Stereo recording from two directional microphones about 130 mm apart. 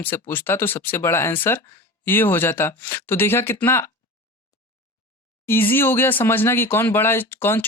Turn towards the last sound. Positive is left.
turn(degrees=15)  # may be behind; listen again after turning